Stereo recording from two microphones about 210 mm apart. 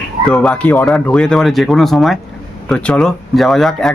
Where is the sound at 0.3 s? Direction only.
5° left (ahead or behind).